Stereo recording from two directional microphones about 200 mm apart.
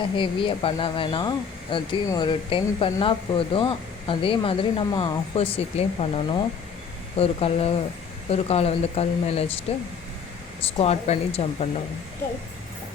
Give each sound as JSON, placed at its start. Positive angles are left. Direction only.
{"t": 0.2, "sound": "speech", "side_deg": 25}